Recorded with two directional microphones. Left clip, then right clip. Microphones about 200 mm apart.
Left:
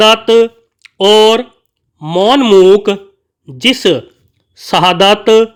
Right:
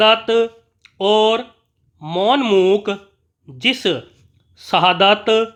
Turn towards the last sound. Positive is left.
turn(degrees=20)  # may be behind; listen again after turning